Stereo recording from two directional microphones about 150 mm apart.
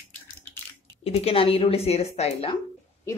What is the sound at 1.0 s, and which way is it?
Speech, 40° left (ahead or behind).